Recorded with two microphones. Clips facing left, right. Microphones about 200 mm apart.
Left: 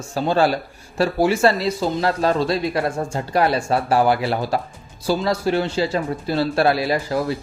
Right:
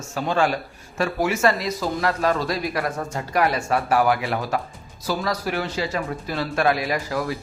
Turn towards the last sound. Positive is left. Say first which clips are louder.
# left 4 dB
turn(degrees=30)  # may be behind; listen again after turning